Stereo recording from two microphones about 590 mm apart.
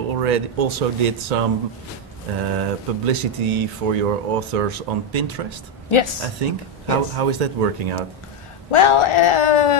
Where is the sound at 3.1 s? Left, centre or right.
Right.